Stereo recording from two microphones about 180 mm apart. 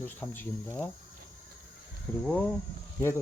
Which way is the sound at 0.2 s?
10° left (ahead or behind).